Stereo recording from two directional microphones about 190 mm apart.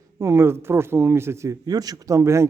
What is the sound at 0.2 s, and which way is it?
A man's voice, 15° right (ahead or behind).